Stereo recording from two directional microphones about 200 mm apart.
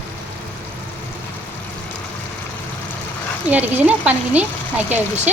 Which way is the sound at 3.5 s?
10° right (ahead or behind).